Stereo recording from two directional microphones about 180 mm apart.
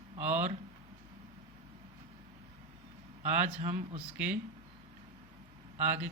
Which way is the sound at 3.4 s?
40° right (ahead or behind).